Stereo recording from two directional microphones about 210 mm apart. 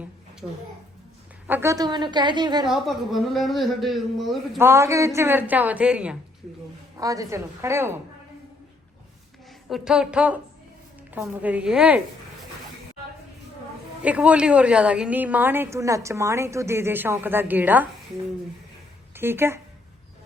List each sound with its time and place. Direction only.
0.4 s speech: centre (ahead or behind)
1.5 s a woman's voice: 10° right (ahead or behind)
2.6 s speech: centre (ahead or behind)
4.6 s a woman's voice: 10° right (ahead or behind)
6.9 s a woman's voice: 15° right (ahead or behind)
9.6 s a woman's voice: centre (ahead or behind)
14.0 s a woman's voice: 5° right (ahead or behind)
19.1 s speech: 10° right (ahead or behind)